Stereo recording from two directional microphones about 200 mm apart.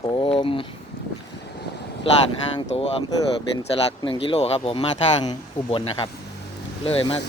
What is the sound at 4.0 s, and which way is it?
Speech, 25° left (ahead or behind).